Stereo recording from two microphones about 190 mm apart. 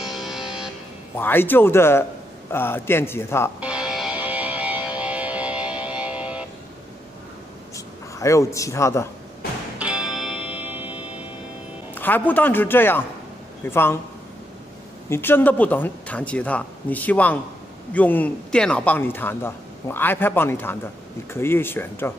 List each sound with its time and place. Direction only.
0.0 s music: centre (ahead or behind)
1.1 s speech: 10° left (ahead or behind)
3.6 s music: 5° right (ahead or behind)
7.7 s a sound: 15° left (ahead or behind)
9.8 s music: 5° right (ahead or behind)
11.9 s speech: 10° left (ahead or behind)
15.0 s speech: 10° left (ahead or behind)